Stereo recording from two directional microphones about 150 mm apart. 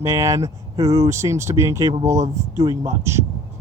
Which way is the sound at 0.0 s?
20° right (ahead or behind).